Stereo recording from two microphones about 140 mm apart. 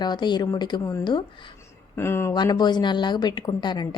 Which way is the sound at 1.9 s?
15° left (ahead or behind).